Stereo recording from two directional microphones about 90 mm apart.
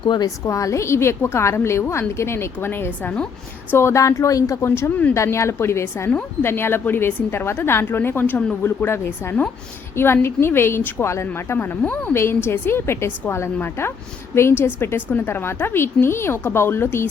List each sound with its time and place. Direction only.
0.0 s a woman's voice: 60° left (ahead or behind)
0.4 s a woman's voice: 35° left (ahead or behind); by 3.2 s 15° left (ahead or behind)
3.7 s a woman's voice: 30° left (ahead or behind)